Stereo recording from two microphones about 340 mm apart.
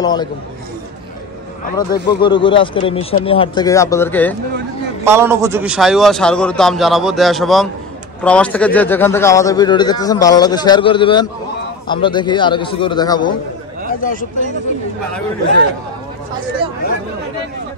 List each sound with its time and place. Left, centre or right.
0.0 s a man's voice: centre
1.8 s a man's voice: centre
5.0 s a man's voice: centre
13.8 s speech: left